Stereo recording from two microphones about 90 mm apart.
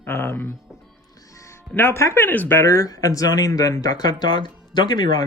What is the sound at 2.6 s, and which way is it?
Speech, 40° left (ahead or behind).